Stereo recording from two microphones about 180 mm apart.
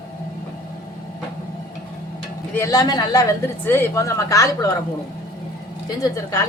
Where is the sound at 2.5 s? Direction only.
20° left (ahead or behind).